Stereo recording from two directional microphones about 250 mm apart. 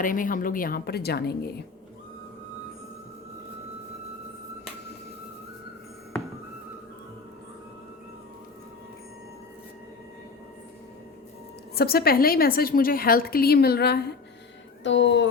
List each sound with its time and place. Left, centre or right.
0.0 s a woman's voice: left
11.7 s a woman's voice: left